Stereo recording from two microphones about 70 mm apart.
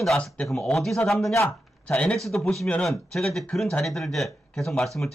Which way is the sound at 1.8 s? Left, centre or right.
Centre.